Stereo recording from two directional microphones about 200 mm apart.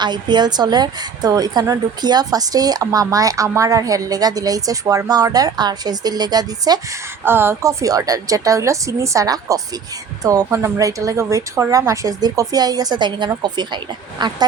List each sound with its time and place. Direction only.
0.0 s a woman's voice: 20° right (ahead or behind)